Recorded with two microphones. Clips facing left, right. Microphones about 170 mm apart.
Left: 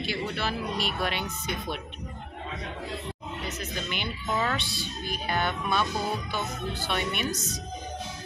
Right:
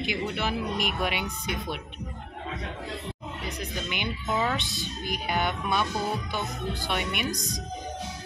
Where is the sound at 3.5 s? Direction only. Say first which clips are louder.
Right 1 dB; 15° right (ahead or behind).